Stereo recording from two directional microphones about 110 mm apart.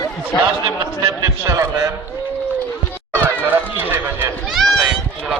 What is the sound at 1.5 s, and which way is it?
Speech, 30° right (ahead or behind).